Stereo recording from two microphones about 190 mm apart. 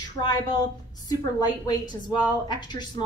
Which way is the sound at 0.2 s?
20° left (ahead or behind).